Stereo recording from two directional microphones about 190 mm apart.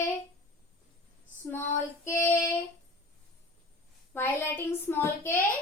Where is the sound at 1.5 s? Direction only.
10° left (ahead or behind).